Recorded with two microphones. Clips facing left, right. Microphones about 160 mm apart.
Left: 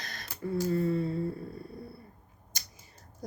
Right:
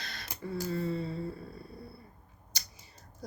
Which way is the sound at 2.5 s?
50° left (ahead or behind).